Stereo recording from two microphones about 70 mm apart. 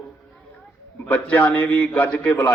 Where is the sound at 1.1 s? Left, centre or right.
Left.